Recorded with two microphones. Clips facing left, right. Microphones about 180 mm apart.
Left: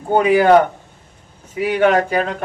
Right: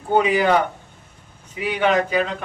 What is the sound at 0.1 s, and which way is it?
Speech, 50° left (ahead or behind).